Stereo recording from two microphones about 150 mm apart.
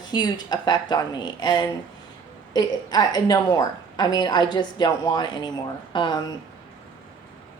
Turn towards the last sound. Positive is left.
turn(degrees=30)  # may be behind; listen again after turning